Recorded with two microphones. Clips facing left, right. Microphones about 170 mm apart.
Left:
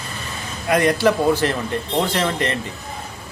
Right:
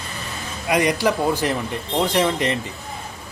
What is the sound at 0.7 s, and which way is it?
A man's voice, 15° right (ahead or behind).